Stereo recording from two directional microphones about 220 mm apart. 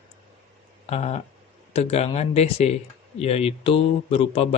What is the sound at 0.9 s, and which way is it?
Speech, 30° left (ahead or behind).